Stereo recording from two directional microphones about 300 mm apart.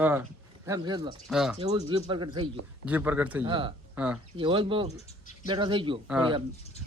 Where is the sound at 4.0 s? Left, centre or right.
Centre.